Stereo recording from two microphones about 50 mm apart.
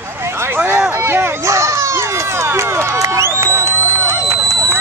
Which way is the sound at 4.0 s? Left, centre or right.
Right.